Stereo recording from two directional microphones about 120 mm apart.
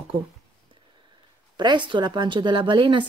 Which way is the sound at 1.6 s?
40° right (ahead or behind).